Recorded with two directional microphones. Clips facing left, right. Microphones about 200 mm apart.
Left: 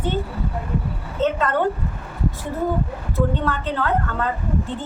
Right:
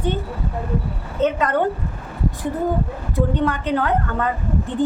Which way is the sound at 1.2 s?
15° right (ahead or behind).